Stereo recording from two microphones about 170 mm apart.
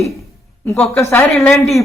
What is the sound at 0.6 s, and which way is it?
Speech, 10° left (ahead or behind).